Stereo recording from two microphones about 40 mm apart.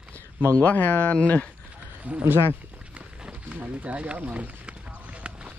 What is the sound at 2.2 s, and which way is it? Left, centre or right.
Speech, right.